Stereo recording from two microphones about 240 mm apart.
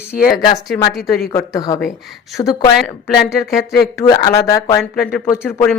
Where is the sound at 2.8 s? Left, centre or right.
Centre.